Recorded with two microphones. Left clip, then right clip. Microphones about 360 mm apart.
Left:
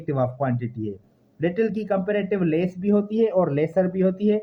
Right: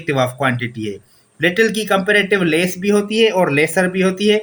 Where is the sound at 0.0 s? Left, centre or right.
Left.